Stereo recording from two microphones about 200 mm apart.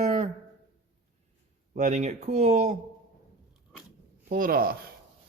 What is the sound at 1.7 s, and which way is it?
Speech, 35° right (ahead or behind).